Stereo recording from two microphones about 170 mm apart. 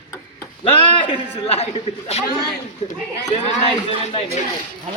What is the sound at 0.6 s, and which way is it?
A man's voice, 30° left (ahead or behind).